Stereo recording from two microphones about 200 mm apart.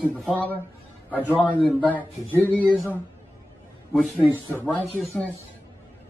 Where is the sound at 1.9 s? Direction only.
10° left (ahead or behind).